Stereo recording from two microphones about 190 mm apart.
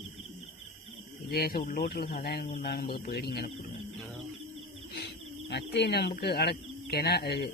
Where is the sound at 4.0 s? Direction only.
Centre (ahead or behind).